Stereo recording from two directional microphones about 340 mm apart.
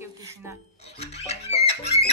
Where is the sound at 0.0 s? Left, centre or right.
Centre.